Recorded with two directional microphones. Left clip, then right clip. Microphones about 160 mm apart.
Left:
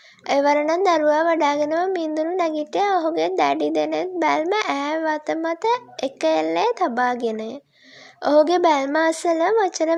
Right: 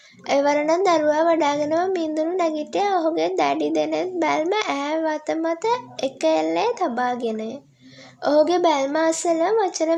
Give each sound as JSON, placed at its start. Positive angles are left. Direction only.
{"t": 0.3, "sound": "a child's voice", "side_deg": 40}